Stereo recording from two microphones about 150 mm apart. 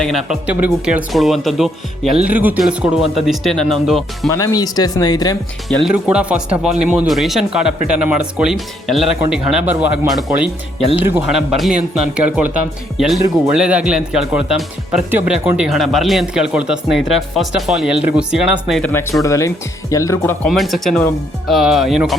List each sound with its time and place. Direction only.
0.0 s a man's voice: centre (ahead or behind)
4.3 s speech: 20° left (ahead or behind)
5.6 s a man's voice: centre (ahead or behind)
10.1 s a man's voice: centre (ahead or behind)
11.3 s a man's voice: centre (ahead or behind)
18.8 s speech: 15° left (ahead or behind)
20.4 s a man's voice: centre (ahead or behind)